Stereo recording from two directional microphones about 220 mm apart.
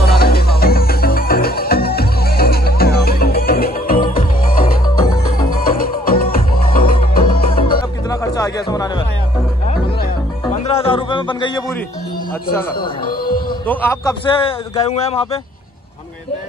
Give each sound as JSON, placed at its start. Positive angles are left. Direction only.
{"t": 0.0, "sound": "music", "side_deg": 45}
{"t": 8.1, "sound": "music", "side_deg": 15}
{"t": 10.5, "sound": "a sound", "side_deg": 25}
{"t": 13.7, "sound": "a man's voice", "side_deg": 10}
{"t": 14.3, "sound": "speech", "side_deg": 25}